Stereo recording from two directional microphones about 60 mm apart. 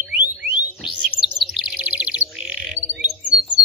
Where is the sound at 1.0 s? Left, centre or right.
Centre.